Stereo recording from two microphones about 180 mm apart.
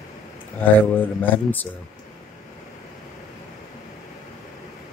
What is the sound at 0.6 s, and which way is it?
Speech, 10° left (ahead or behind).